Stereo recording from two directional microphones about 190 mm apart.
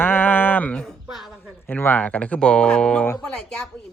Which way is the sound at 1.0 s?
Centre (ahead or behind).